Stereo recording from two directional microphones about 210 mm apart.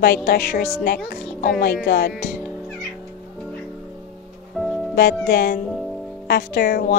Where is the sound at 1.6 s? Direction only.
45° left (ahead or behind).